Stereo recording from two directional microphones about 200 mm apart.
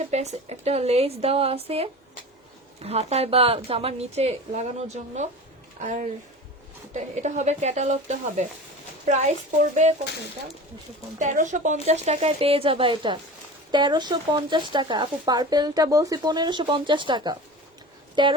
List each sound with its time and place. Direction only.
0.0 s a woman's voice: 35° right (ahead or behind)
5.8 s a woman's voice: 40° right (ahead or behind)
11.2 s a woman's voice: 35° right (ahead or behind)